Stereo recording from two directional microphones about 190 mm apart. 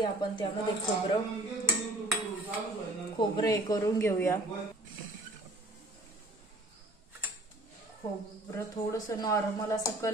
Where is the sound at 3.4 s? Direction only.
20° left (ahead or behind).